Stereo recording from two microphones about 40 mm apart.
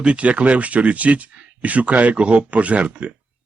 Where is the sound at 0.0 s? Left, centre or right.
Right.